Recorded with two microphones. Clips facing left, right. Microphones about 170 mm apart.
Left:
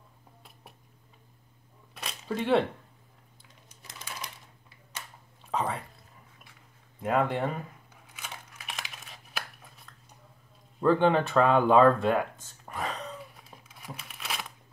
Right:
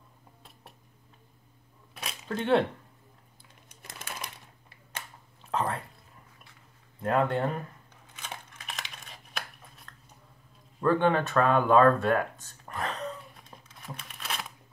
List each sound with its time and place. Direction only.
2.0 s camera: centre (ahead or behind)
3.8 s typewriter: 55° right (ahead or behind)
5.5 s a sound: centre (ahead or behind)
7.0 s speech: 5° left (ahead or behind)
8.1 s crumpling: 10° left (ahead or behind)
10.8 s speech: 15° left (ahead or behind)
12.6 s whispering: 5° left (ahead or behind)
13.4 s crumpling: 10° left (ahead or behind)